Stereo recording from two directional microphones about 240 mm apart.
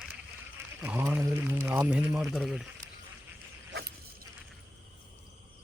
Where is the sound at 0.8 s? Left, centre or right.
Centre.